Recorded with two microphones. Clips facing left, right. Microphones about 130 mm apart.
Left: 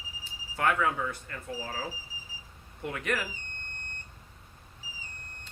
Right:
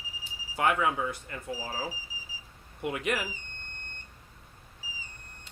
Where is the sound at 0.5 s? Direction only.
15° right (ahead or behind).